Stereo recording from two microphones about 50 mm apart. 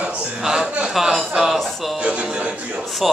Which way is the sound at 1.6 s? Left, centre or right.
Centre.